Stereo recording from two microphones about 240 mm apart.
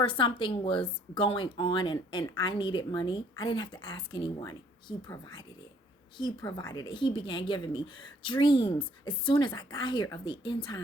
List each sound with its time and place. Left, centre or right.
0.0 s speech: left